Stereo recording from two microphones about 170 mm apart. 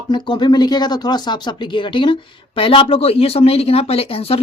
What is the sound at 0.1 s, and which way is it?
Speech, 25° left (ahead or behind).